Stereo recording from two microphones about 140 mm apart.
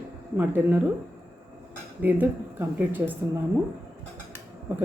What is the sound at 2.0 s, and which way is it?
Speech, 15° right (ahead or behind).